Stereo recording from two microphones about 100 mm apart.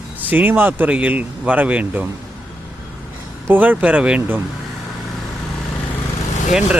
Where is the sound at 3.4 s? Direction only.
20° right (ahead or behind).